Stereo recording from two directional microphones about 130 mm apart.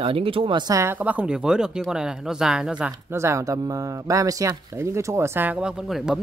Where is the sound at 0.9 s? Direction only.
10° right (ahead or behind).